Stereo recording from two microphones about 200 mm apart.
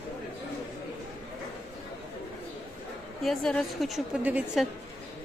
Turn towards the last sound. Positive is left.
turn(degrees=-5)  # may be behind; listen again after turning